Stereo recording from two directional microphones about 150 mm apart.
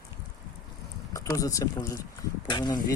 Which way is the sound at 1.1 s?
20° left (ahead or behind).